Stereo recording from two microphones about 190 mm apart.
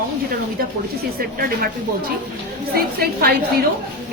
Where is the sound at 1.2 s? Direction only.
50° right (ahead or behind).